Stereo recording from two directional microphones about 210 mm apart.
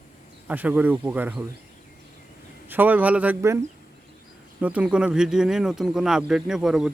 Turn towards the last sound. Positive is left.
turn(degrees=0)  # may be behind; listen again after turning